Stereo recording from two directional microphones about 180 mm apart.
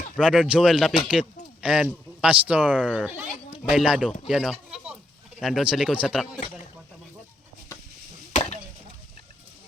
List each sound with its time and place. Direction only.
0.2 s speech: 5° right (ahead or behind)